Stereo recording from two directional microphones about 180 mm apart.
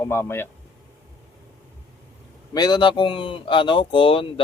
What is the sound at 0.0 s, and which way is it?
Speech, 15° left (ahead or behind).